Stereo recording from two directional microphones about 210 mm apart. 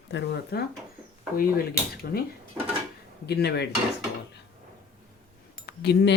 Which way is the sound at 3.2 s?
50° left (ahead or behind).